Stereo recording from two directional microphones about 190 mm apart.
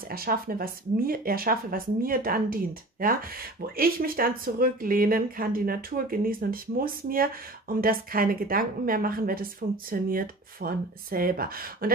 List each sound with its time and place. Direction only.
0.1 s speech: 50° right (ahead or behind)